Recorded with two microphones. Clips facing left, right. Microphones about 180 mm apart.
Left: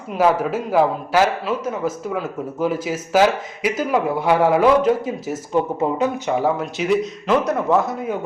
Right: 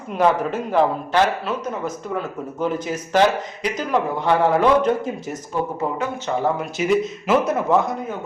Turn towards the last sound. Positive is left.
turn(degrees=0)  # may be behind; listen again after turning